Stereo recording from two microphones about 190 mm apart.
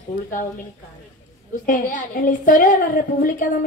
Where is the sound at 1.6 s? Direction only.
45° left (ahead or behind).